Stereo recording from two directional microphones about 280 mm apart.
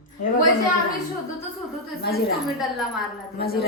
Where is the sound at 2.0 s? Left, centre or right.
Left.